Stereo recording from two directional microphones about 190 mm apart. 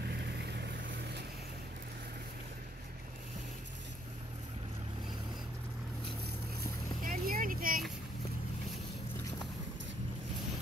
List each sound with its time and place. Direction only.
6.6 s vehicle: 50° right (ahead or behind)